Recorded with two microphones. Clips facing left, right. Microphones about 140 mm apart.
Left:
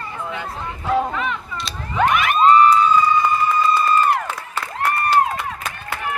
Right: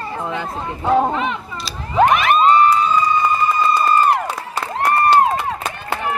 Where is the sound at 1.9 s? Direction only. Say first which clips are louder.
Right 4 dB; 30° right (ahead or behind).